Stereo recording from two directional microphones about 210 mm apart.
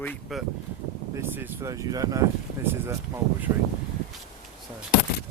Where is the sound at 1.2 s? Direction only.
15° right (ahead or behind).